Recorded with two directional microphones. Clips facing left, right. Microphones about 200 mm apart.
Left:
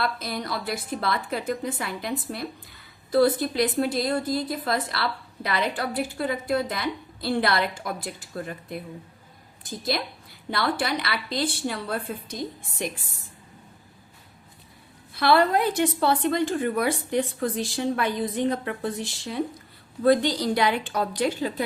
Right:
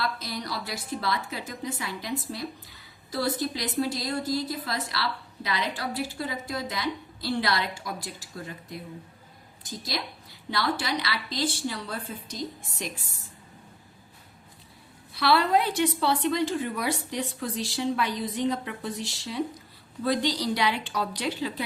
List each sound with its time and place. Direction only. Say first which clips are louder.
0.0 s a woman's voice: left 3 dB; 55° left (ahead or behind)
15.1 s a woman's voice: left 3 dB; 50° left (ahead or behind)